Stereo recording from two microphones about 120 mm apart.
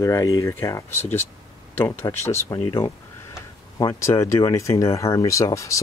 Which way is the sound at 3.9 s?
25° left (ahead or behind).